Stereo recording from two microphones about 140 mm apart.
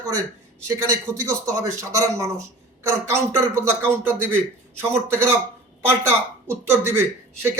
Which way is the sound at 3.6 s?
15° right (ahead or behind).